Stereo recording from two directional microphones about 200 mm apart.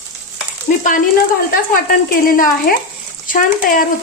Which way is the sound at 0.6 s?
45° left (ahead or behind).